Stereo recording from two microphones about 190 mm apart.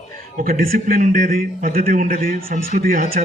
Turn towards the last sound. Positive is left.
turn(degrees=-45)  # may be behind; listen again after turning